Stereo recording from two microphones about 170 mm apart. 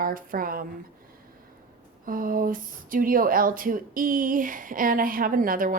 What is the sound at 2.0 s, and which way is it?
A woman's voice, 55° right (ahead or behind).